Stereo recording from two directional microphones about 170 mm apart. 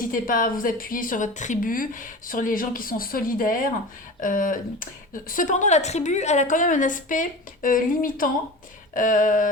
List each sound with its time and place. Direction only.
0.1 s a woman's voice: 55° left (ahead or behind)